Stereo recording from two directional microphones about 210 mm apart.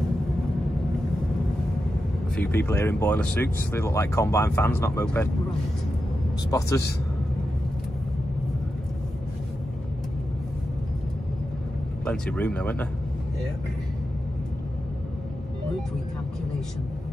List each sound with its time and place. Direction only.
2.3 s speech: 10° left (ahead or behind)
6.5 s speech: 15° left (ahead or behind)
12.0 s speech: 5° left (ahead or behind)